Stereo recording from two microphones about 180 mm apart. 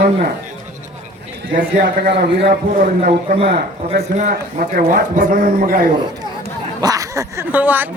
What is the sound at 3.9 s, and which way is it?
A man's voice, 40° right (ahead or behind).